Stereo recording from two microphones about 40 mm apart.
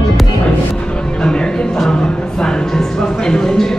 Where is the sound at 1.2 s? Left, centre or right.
Left.